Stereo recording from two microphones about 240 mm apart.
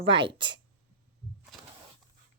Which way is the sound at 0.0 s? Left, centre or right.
Right.